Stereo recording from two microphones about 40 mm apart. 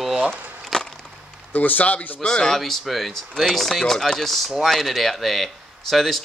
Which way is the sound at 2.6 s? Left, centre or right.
Centre.